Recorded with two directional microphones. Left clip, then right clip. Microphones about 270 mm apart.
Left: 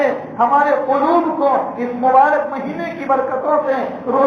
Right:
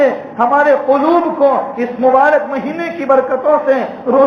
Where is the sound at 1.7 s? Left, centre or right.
Right.